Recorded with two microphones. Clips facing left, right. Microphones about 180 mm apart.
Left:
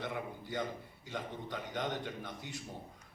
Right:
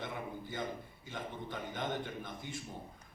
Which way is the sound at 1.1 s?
70° left (ahead or behind).